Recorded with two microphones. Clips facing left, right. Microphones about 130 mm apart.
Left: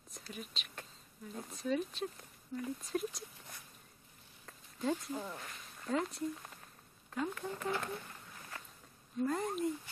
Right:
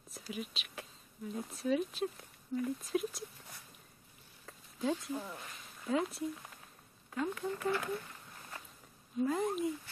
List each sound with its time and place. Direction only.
0.1 s whispering: 5° right (ahead or behind)
1.3 s speech: centre (ahead or behind)
9.2 s speech: 5° right (ahead or behind)